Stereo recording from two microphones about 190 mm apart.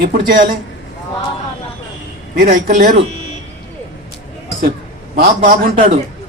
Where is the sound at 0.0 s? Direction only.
50° right (ahead or behind).